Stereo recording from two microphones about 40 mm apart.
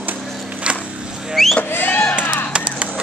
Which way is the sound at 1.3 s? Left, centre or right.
Centre.